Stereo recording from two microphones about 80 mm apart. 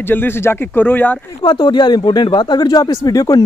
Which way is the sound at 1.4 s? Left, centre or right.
Left.